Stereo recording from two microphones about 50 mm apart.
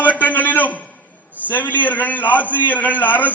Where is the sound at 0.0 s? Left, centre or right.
Left.